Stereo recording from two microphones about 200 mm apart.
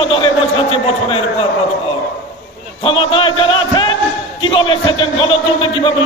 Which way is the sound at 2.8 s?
25° left (ahead or behind).